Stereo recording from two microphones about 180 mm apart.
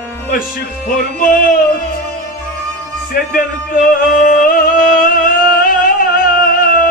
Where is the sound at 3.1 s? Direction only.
50° left (ahead or behind).